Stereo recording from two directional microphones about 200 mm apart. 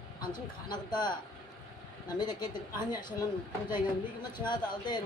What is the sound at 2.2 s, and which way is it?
Speech, 20° left (ahead or behind).